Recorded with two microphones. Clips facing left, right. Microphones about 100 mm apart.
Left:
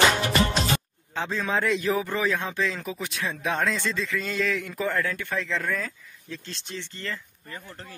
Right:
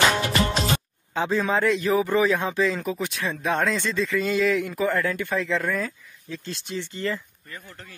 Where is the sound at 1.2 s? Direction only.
5° right (ahead or behind).